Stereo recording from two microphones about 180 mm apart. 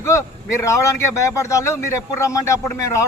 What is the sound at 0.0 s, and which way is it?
A man's voice, 15° left (ahead or behind).